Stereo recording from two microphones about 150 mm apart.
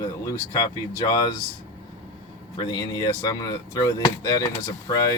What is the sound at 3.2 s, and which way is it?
Speech, 25° left (ahead or behind).